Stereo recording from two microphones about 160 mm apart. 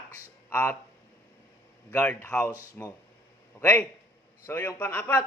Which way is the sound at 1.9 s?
10° left (ahead or behind).